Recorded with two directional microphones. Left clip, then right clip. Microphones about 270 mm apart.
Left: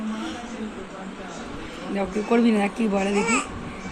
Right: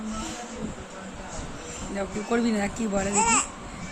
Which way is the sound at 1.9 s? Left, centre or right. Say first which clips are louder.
Left 5 dB; centre.